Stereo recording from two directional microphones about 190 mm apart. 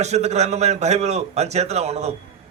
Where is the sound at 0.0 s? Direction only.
35° right (ahead or behind).